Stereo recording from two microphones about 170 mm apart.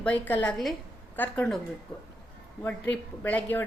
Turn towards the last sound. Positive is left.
turn(degrees=10)  # may be behind; listen again after turning